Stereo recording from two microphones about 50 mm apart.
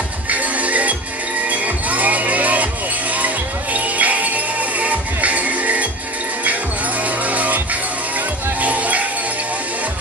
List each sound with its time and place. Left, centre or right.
0.3 s music: right
7.2 s music: right